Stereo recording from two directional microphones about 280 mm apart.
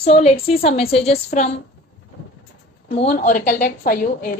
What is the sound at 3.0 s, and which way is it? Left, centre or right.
A woman's voice, left.